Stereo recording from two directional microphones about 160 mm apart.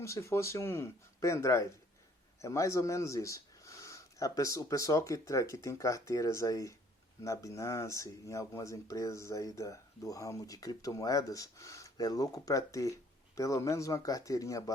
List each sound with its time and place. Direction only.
0.0 s speech: 20° left (ahead or behind)